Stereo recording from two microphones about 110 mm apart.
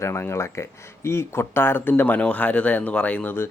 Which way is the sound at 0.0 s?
25° left (ahead or behind).